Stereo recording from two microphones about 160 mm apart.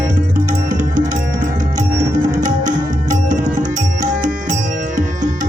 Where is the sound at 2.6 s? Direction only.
50° right (ahead or behind).